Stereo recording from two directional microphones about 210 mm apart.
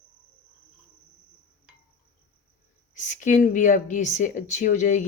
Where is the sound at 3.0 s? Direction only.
35° left (ahead or behind).